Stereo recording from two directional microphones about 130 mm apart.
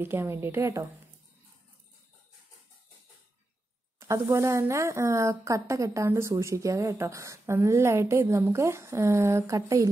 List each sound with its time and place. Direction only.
0.0 s a woman's voice: 15° right (ahead or behind)
4.0 s a woman's voice: 20° right (ahead or behind)